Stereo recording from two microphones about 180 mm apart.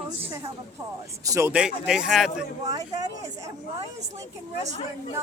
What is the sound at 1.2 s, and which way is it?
Speech, 20° right (ahead or behind).